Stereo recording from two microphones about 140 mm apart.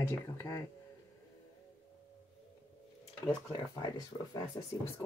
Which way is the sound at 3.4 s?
25° left (ahead or behind).